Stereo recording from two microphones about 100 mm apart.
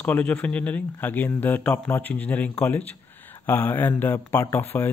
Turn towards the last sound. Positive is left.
turn(degrees=20)  # may be behind; listen again after turning